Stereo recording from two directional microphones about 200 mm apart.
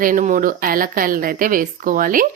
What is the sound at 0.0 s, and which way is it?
Speech, 40° right (ahead or behind).